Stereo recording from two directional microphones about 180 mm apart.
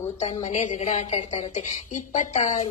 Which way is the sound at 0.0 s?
35° left (ahead or behind).